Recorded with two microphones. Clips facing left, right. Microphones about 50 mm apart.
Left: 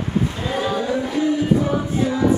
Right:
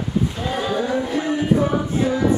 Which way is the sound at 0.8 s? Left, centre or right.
Right.